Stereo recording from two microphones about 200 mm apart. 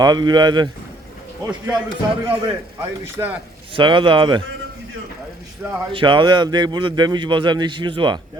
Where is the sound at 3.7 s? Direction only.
25° right (ahead or behind).